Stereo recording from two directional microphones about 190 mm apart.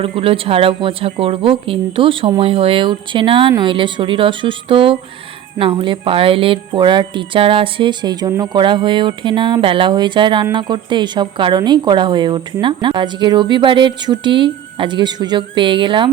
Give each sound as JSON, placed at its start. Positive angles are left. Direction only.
{"t": 0.0, "sound": "a woman's voice", "side_deg": -30}